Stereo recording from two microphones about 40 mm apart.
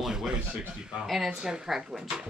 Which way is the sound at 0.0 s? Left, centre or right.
Centre.